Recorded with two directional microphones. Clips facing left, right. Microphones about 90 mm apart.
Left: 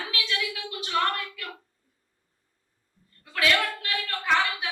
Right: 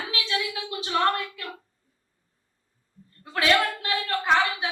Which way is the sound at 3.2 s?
30° right (ahead or behind).